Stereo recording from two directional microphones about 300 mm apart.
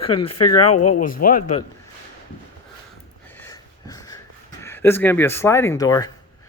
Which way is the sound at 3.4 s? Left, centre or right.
Centre.